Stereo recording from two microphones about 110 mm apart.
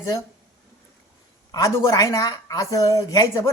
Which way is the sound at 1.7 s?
25° left (ahead or behind).